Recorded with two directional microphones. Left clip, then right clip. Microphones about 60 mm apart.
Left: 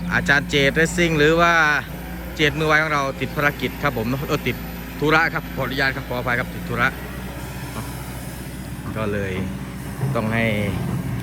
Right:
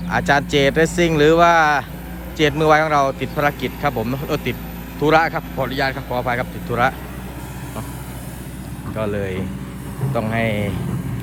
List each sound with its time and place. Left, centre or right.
0.1 s speech: right
6.7 s speech: right
9.0 s speech: right
10.2 s speech: centre